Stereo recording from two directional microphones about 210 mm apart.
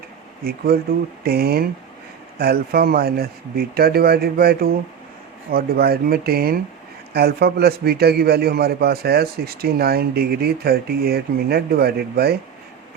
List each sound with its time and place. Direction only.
0.4 s a man's voice: 45° right (ahead or behind)